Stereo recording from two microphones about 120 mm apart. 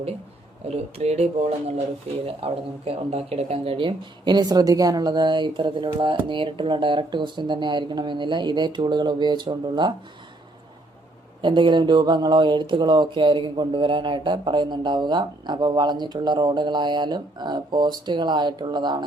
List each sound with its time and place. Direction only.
0.7 s speech: 60° right (ahead or behind)
2.2 s speech: 50° right (ahead or behind)
11.4 s speech: 40° right (ahead or behind)